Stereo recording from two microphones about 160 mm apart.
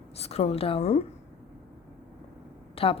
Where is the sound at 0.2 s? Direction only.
40° left (ahead or behind).